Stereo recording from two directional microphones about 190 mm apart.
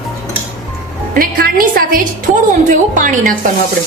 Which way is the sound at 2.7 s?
45° right (ahead or behind).